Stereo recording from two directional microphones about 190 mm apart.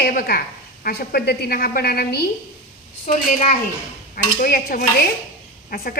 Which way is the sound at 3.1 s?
40° left (ahead or behind).